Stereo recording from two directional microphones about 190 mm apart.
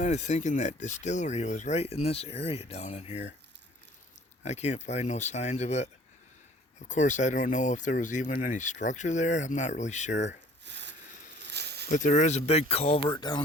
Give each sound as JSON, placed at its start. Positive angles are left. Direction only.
{"t": 0.0, "sound": "speech", "side_deg": 40}
{"t": 4.4, "sound": "speech", "side_deg": 35}
{"t": 10.6, "sound": "a sound", "side_deg": -65}
{"t": 11.9, "sound": "speech", "side_deg": 40}